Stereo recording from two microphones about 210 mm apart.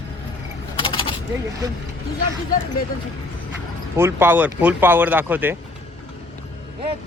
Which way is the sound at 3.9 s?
10° right (ahead or behind).